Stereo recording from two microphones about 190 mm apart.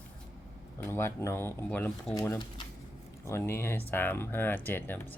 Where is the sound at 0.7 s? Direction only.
15° left (ahead or behind).